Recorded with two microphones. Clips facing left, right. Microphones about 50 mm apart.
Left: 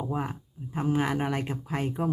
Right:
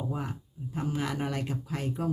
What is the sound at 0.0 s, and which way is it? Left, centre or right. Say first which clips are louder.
Speech: left 3 dB; left.